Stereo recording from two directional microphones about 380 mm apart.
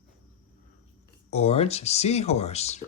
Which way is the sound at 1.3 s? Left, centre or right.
Centre.